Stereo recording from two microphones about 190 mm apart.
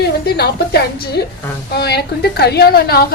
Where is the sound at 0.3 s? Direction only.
60° left (ahead or behind).